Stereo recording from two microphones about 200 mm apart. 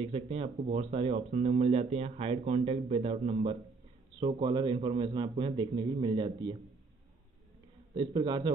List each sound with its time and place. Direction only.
0.0 s speech: 30° right (ahead or behind)
7.9 s speech: 25° right (ahead or behind)